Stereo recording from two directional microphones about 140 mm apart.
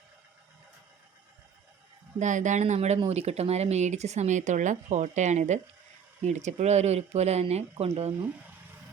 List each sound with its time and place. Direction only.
2.1 s speech: 60° right (ahead or behind)